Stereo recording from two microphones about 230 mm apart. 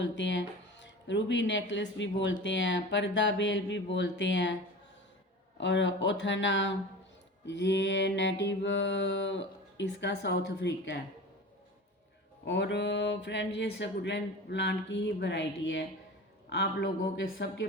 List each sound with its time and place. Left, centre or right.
0.0 s speech: left
2.4 s mantra: left
5.5 s mantra: left
12.5 s mantra: left